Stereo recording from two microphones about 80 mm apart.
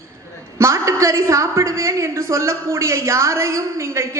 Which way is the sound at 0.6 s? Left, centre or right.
Right.